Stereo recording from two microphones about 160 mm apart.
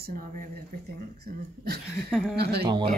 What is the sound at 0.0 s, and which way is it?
Speech, 60° right (ahead or behind).